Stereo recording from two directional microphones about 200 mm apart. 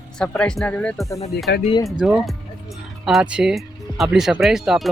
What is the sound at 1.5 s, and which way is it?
Speech, 55° left (ahead or behind).